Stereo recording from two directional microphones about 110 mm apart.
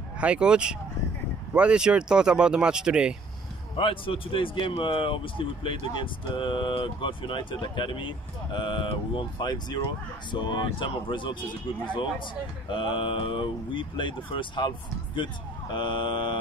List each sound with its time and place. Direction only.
0.2 s speech: 10° right (ahead or behind)
3.7 s speech: 50° left (ahead or behind)
12.6 s speech: 50° left (ahead or behind)
15.7 s speech: 45° left (ahead or behind)